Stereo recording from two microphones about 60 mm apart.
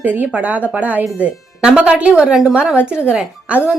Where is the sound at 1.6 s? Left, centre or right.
Centre.